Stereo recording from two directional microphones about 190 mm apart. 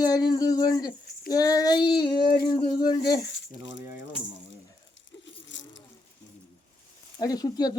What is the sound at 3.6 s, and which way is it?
Speech, 70° left (ahead or behind).